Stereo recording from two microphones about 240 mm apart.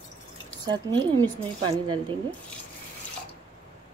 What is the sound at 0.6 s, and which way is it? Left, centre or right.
A woman's voice, centre.